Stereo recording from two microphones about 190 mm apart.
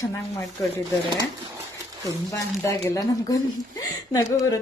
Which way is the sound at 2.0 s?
15° left (ahead or behind).